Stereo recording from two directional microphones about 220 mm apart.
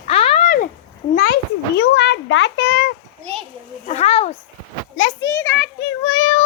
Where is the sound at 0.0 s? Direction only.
25° left (ahead or behind); by 2.9 s 50° left (ahead or behind).